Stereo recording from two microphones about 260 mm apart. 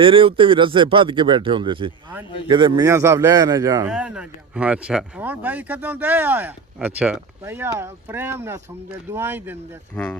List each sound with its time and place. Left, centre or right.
0.0 s a man's voice: right
9.9 s speech: centre